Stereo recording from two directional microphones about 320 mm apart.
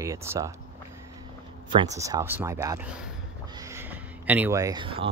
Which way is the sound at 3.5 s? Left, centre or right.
Centre.